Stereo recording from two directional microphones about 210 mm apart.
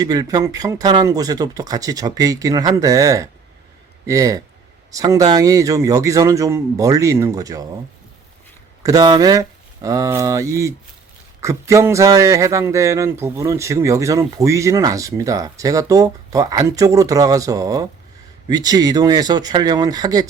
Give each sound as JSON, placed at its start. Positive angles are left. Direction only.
{"t": 0.0, "sound": "speech", "side_deg": -20}
{"t": 8.8, "sound": "speech", "side_deg": -15}